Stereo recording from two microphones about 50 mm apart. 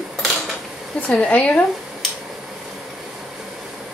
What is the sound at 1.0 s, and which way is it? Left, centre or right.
Speech, left.